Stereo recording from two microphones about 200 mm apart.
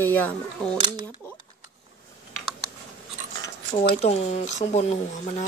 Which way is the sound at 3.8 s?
30° left (ahead or behind).